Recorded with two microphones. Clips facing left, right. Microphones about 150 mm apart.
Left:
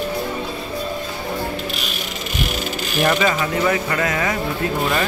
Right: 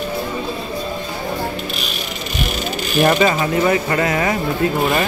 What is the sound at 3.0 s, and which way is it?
Speech, 35° right (ahead or behind).